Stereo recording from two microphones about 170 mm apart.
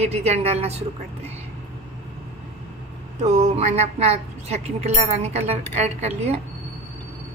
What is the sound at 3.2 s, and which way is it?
A woman's voice, 40° right (ahead or behind).